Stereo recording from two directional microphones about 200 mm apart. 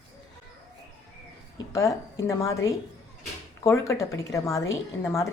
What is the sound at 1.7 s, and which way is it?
Speech, 15° left (ahead or behind).